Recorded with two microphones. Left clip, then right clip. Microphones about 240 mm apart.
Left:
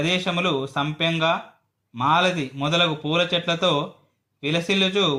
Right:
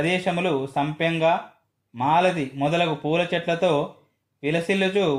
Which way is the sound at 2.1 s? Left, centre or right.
Left.